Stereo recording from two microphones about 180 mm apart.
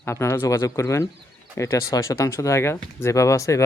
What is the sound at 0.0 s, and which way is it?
Speech, 15° left (ahead or behind).